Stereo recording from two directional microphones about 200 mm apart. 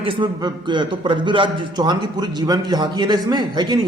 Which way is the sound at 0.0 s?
25° right (ahead or behind).